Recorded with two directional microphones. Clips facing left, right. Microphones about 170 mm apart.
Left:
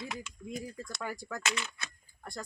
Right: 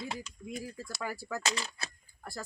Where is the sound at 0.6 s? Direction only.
5° right (ahead or behind).